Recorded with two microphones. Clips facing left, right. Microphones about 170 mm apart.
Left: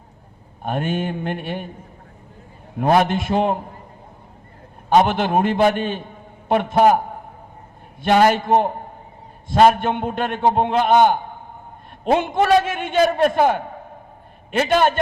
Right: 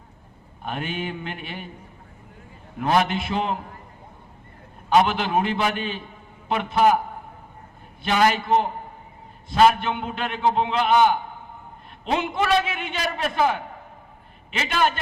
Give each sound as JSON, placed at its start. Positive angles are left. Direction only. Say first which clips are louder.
{"t": 0.6, "sound": "a man's voice", "louder": "left 6 dB", "side_deg": 45}
{"t": 2.7, "sound": "a man's voice", "louder": "left 5 dB", "side_deg": 45}
{"t": 4.9, "sound": "a man's voice", "louder": "left 3 dB", "side_deg": 45}
{"t": 8.0, "sound": "a man's voice", "louder": "left 5 dB", "side_deg": 45}